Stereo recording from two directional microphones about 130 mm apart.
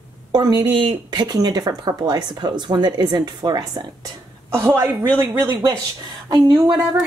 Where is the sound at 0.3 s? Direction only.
30° right (ahead or behind).